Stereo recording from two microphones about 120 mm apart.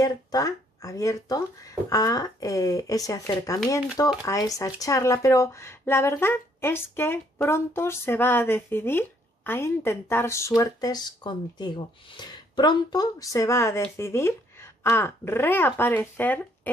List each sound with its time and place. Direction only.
0.0 s speech: 35° left (ahead or behind); by 16.3 s 15° left (ahead or behind)